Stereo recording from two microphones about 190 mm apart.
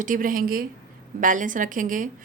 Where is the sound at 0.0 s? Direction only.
45° right (ahead or behind).